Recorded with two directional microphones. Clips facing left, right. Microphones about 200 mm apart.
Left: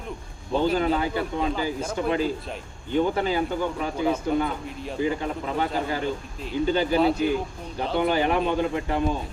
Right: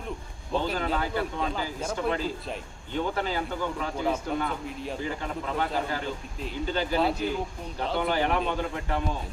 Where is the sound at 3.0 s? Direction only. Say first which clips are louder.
Left 6 dB; 15° left (ahead or behind).